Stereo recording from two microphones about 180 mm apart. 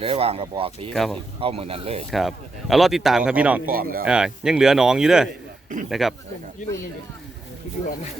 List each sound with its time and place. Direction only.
0.0 s speech: 30° right (ahead or behind)
0.9 s speech: centre (ahead or behind)
1.4 s speech: 30° right (ahead or behind)
2.0 s speech: centre (ahead or behind)
3.7 s speech: 55° right (ahead or behind)
4.0 s speech: 5° right (ahead or behind)